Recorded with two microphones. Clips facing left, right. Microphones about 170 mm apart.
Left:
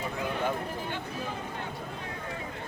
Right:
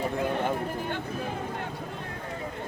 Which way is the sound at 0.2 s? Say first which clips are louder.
Even; 55° right (ahead or behind).